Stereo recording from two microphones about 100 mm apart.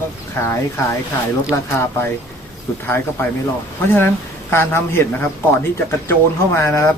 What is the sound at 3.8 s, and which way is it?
Speech, 20° left (ahead or behind).